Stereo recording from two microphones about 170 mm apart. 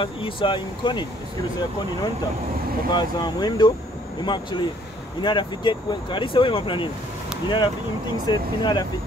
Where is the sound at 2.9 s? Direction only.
25° left (ahead or behind).